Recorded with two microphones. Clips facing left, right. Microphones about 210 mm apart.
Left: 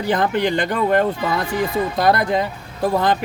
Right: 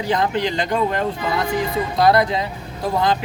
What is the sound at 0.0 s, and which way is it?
Speech, 55° left (ahead or behind).